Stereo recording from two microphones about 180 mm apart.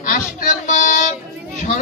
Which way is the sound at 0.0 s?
45° left (ahead or behind).